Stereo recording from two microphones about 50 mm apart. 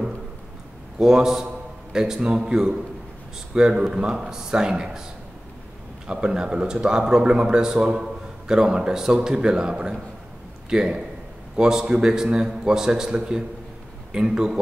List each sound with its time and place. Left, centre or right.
0.9 s a man's voice: centre
6.0 s speech: centre